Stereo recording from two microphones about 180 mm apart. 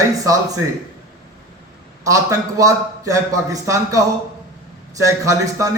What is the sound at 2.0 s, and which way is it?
A man's voice, 20° right (ahead or behind).